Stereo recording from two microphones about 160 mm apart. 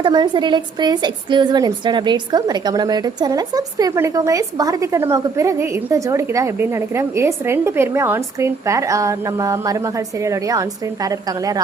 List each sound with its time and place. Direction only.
0.0 s a woman's voice: 30° right (ahead or behind)